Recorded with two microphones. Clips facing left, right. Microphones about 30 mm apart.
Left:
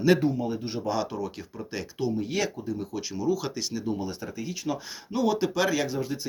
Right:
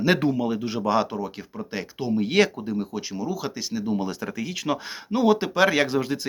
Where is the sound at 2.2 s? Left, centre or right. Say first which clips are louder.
Right 8 dB; right.